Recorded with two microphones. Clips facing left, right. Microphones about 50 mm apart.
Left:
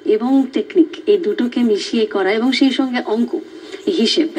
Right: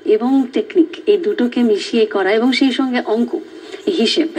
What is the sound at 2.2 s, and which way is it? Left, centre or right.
Speech, right.